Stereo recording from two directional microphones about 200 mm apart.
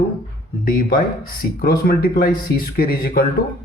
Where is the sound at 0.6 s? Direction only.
45° left (ahead or behind).